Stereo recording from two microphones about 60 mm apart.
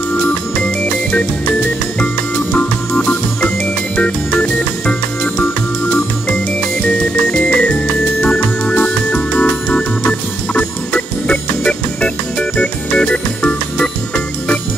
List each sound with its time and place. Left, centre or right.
2.5 s organ: centre
3.9 s music: centre
6.9 s music: centre